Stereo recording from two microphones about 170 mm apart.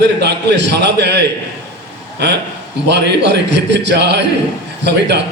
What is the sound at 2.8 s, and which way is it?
A man's voice, 85° right.